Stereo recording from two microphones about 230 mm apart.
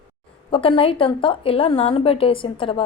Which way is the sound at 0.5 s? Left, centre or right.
Left.